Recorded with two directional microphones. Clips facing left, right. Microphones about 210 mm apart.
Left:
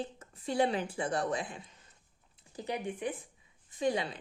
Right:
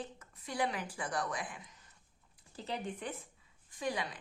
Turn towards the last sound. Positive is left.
turn(degrees=25)  # may be behind; listen again after turning